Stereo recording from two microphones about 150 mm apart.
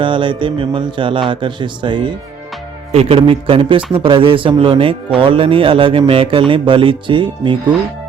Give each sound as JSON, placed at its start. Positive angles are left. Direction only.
{"t": 0.0, "sound": "speech", "side_deg": -35}